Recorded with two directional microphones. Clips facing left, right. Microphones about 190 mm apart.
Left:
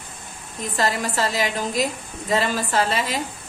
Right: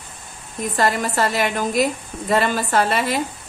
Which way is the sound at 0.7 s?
55° right (ahead or behind).